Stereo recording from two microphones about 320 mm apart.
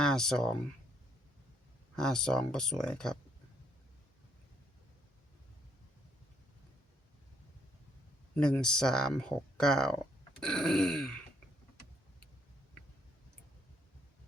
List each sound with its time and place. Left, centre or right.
0.0 s speech: centre
2.0 s speech: centre
8.4 s speech: centre